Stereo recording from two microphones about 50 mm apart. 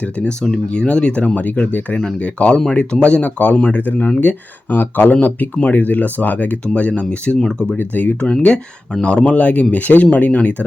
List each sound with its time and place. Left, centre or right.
0.0 s speech: left
7.8 s speech: left
8.2 s speech: left